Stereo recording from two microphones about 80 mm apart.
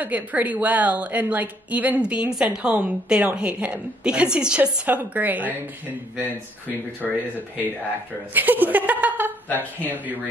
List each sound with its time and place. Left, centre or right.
0.0 s a woman's voice: centre
7.0 s speech: centre
8.4 s laughter: right
9.6 s a woman's voice: right